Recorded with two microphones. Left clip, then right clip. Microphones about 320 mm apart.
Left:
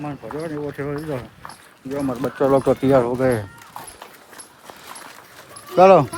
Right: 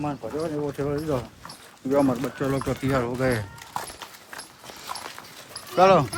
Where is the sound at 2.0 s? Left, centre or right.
Centre.